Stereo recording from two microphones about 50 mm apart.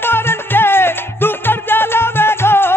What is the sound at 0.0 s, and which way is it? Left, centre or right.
Music, left.